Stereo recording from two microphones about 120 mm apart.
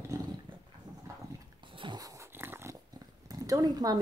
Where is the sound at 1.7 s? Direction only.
40° right (ahead or behind).